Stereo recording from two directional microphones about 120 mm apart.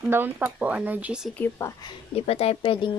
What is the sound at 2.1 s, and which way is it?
Speech, 55° left (ahead or behind).